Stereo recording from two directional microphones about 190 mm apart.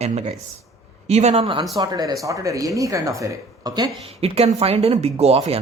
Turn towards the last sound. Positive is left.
turn(degrees=-30)  # may be behind; listen again after turning